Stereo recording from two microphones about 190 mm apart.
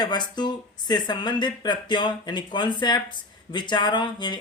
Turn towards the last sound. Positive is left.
turn(degrees=25)  # may be behind; listen again after turning